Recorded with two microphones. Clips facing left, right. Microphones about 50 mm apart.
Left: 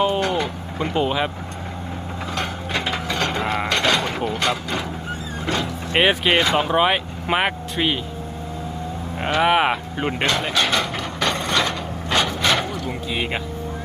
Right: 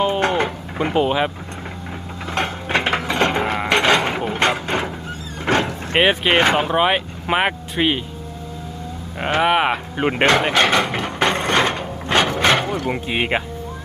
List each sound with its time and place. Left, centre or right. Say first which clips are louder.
0.2 s a sound: right 3 dB; right
0.9 s speech: right 3 dB; centre
2.3 s wood: right 5 dB; right
3.1 s music: right 2 dB; right
3.7 s mechanisms: right 6 dB; right
4.3 s speech: right 3 dB; right
5.5 s vehicle: right 5 dB; right
6.0 s speech: right 1 dB; centre
6.3 s speech: right 3 dB; right
6.6 s speech: right 1 dB; centre
9.4 s speech: even; centre
10.0 s speech: right 8 dB; right
10.2 s mechanisms: right 6 dB; right